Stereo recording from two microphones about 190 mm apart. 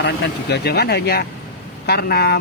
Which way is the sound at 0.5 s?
55° left (ahead or behind).